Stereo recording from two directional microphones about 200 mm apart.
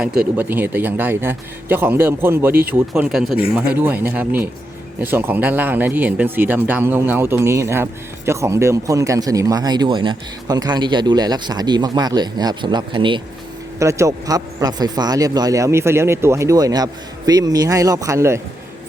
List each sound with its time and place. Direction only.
0.3 s speech: 10° right (ahead or behind)